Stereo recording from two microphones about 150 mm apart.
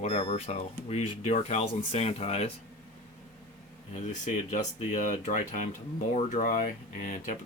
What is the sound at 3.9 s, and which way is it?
Speech, 50° left (ahead or behind).